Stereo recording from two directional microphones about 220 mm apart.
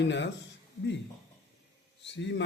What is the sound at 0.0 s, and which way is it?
Speech, 55° left (ahead or behind).